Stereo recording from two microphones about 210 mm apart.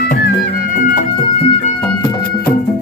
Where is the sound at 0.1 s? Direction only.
40° left (ahead or behind).